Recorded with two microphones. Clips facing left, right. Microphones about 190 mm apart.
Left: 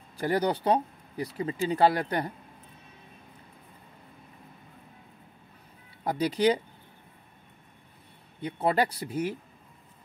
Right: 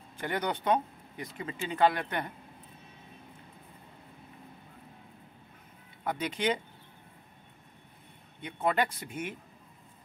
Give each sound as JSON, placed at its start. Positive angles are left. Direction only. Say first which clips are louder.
{"t": 0.2, "sound": "speech", "louder": "left 6 dB", "side_deg": 35}
{"t": 6.0, "sound": "speech", "louder": "left 6 dB", "side_deg": 35}
{"t": 8.4, "sound": "speech", "louder": "left 3 dB", "side_deg": 35}